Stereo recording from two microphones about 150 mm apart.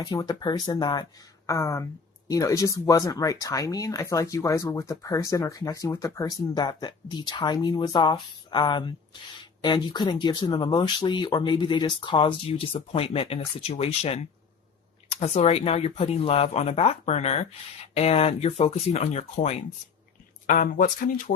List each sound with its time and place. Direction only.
0.0 s speech: 25° left (ahead or behind); by 19.6 s 45° left (ahead or behind)
20.5 s speech: 60° left (ahead or behind)